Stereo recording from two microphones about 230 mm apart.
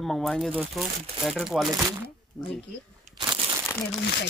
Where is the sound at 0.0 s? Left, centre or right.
Centre.